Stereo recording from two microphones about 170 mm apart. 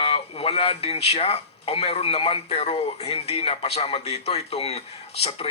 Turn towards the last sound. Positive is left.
turn(degrees=35)  # may be behind; listen again after turning